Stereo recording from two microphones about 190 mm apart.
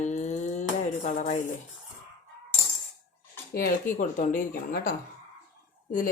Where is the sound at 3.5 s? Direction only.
45° left (ahead or behind).